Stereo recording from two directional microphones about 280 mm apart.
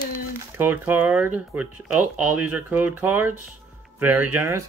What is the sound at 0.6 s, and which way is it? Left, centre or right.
Speech, centre.